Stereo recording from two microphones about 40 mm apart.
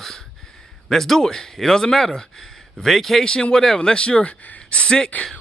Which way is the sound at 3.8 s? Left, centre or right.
Left.